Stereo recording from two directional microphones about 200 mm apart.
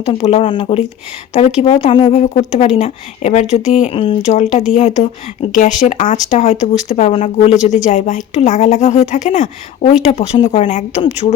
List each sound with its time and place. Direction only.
0.0 s speech: 30° left (ahead or behind)